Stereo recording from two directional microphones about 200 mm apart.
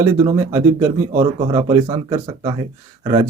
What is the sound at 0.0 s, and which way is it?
Speech, 15° right (ahead or behind).